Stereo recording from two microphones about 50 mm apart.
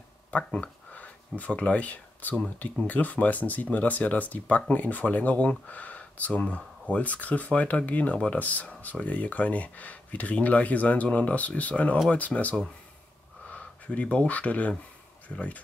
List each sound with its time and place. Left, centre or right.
0.5 s speech: left